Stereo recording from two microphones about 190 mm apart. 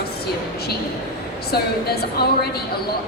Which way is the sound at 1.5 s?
55° left (ahead or behind).